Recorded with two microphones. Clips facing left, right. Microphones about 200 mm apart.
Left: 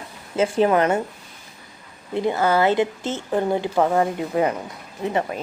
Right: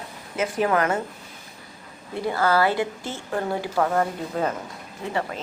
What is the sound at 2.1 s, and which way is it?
A woman's voice, 20° left (ahead or behind).